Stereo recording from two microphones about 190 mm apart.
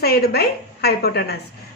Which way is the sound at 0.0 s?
55° left (ahead or behind).